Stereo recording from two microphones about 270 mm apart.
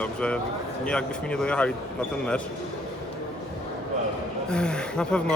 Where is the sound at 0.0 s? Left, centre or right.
Centre.